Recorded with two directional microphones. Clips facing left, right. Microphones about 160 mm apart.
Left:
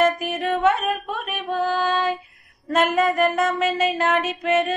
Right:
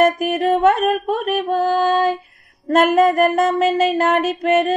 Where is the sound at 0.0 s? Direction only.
45° right (ahead or behind).